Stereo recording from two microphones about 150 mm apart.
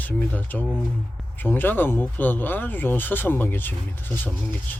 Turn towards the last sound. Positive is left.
turn(degrees=15)  # may be behind; listen again after turning